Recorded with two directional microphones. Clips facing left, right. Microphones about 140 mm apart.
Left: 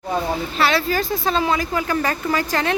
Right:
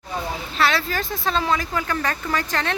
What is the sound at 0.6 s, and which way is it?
Speech, centre (ahead or behind).